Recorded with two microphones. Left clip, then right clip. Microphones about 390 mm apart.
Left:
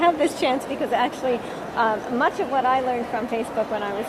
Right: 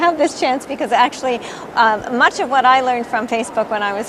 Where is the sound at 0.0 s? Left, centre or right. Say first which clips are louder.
Right 4 dB; right.